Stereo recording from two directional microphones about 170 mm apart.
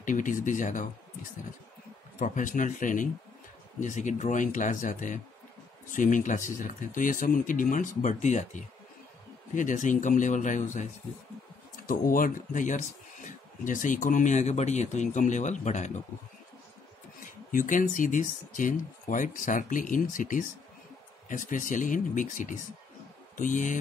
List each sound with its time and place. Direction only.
0.0 s speech: 50° left (ahead or behind)
2.1 s speech: 50° left (ahead or behind)
11.8 s speech: 55° left (ahead or behind)
17.5 s speech: 50° left (ahead or behind)